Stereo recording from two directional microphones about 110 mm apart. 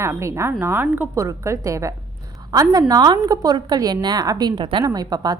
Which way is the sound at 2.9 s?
35° right (ahead or behind).